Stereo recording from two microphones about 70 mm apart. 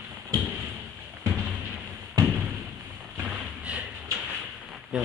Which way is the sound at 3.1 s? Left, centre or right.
Right.